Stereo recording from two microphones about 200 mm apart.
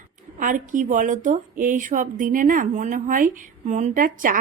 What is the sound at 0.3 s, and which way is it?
Speech, 40° right (ahead or behind).